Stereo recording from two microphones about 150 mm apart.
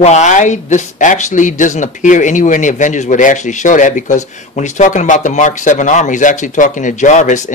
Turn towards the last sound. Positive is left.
turn(degrees=55)  # may be behind; listen again after turning